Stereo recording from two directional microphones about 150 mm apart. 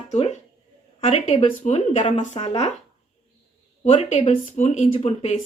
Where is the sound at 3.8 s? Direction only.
45° left (ahead or behind).